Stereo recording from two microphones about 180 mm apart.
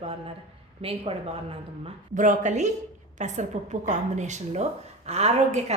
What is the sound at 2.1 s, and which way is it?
A woman's voice, 45° right (ahead or behind).